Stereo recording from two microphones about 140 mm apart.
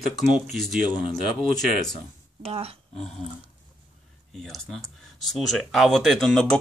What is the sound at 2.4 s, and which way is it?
Speech, 45° right (ahead or behind).